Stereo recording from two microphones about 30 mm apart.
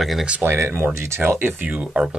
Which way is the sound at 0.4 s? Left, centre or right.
Right.